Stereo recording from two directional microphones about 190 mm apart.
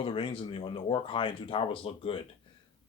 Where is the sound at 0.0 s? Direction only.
30° left (ahead or behind).